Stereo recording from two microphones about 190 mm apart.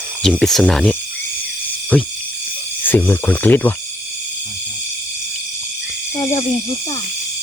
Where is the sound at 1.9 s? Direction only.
5° left (ahead or behind).